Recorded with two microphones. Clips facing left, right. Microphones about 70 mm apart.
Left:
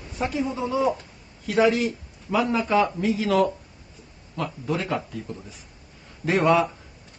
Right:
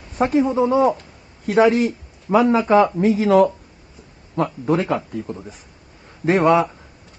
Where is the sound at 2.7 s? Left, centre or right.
Right.